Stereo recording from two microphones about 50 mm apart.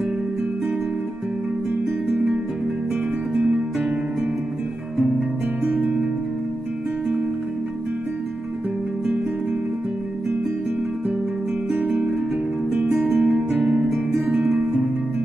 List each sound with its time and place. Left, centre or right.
5.6 s music: right
12.9 s music: right
13.5 s music: centre